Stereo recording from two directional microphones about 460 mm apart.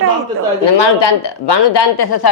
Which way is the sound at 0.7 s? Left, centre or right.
Left.